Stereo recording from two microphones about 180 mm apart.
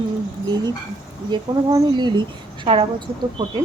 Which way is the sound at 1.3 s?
20° right (ahead or behind).